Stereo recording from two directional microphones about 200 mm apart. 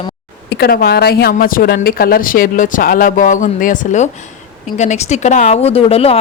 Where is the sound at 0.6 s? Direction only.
50° left (ahead or behind).